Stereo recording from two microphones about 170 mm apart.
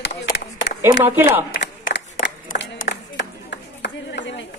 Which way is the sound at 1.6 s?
90° left.